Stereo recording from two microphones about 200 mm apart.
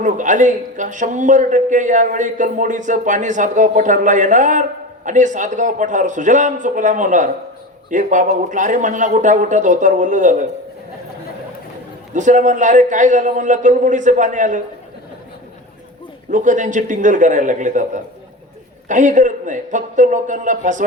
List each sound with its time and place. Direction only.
0.0 s a man's voice: 40° right (ahead or behind)
12.1 s a man's voice: 40° right (ahead or behind)
16.3 s a man's voice: 40° right (ahead or behind)